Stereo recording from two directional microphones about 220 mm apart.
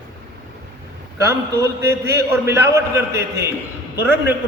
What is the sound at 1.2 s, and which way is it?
A man's voice, 15° right (ahead or behind).